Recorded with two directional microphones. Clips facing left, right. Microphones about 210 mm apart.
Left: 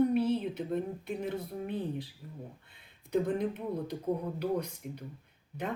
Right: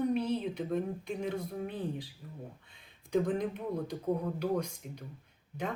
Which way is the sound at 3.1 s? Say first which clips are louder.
Even; 5° left (ahead or behind).